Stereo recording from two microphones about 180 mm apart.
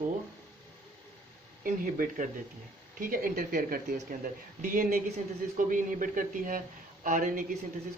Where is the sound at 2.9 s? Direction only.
50° right (ahead or behind).